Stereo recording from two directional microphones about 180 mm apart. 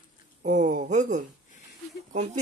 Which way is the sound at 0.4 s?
45° right (ahead or behind).